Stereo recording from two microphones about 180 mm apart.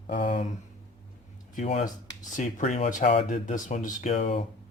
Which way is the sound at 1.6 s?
35° left (ahead or behind).